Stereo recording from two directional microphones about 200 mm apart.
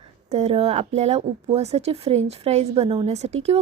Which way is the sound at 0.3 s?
30° right (ahead or behind).